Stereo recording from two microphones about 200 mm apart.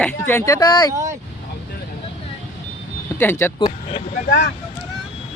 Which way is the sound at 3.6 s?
30° left (ahead or behind).